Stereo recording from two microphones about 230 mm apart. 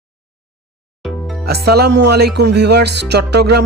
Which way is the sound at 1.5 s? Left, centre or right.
Right.